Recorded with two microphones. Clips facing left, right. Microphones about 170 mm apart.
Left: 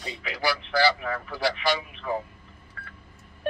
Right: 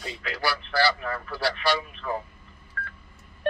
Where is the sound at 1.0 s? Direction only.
15° left (ahead or behind).